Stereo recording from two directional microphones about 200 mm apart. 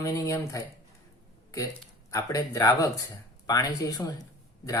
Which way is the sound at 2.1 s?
15° left (ahead or behind).